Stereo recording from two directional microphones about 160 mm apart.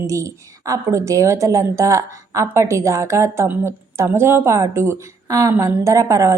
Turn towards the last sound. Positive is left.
turn(degrees=-20)  # may be behind; listen again after turning